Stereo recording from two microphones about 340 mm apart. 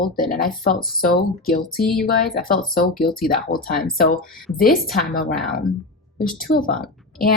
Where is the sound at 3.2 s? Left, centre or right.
Left.